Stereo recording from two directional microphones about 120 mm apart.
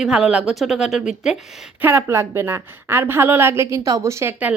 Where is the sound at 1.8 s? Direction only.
20° right (ahead or behind).